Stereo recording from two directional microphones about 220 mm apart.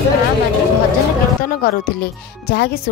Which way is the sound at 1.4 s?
40° left (ahead or behind).